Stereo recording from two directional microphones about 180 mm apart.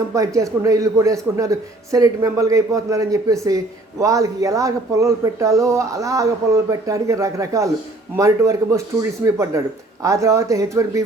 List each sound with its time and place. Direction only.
0.1 s a man's voice: 20° right (ahead or behind)